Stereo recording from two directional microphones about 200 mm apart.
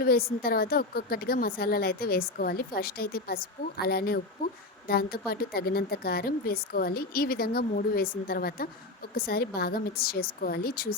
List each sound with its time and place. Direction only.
0.0 s a woman's voice: 50° left (ahead or behind)